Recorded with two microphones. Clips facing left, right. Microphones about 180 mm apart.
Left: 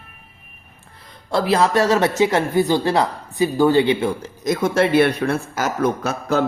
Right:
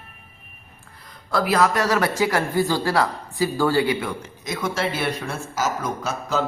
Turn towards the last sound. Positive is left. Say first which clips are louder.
# left 4 dB
turn(degrees=60)  # may be behind; listen again after turning